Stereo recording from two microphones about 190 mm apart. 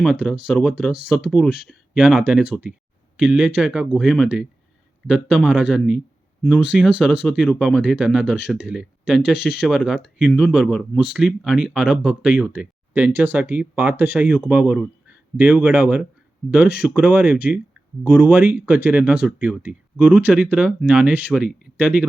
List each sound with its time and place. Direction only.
0.0 s speech: centre (ahead or behind)